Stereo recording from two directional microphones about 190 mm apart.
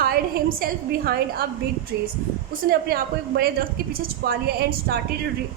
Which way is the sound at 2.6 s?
55° right (ahead or behind).